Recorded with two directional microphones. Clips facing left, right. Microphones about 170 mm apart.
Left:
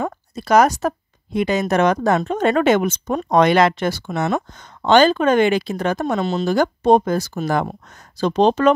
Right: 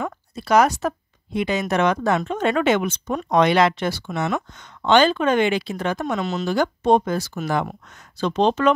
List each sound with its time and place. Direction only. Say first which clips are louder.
0.0 s speech: left 3 dB; 40° left (ahead or behind)